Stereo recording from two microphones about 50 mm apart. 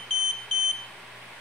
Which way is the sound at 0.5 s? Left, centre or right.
Centre.